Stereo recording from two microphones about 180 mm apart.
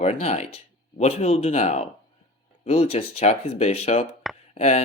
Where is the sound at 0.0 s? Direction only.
35° left (ahead or behind).